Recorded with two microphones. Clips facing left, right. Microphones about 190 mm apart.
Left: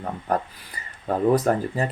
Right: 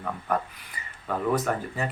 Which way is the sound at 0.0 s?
35° left (ahead or behind).